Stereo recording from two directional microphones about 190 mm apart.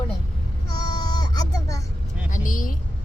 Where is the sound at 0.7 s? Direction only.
20° left (ahead or behind).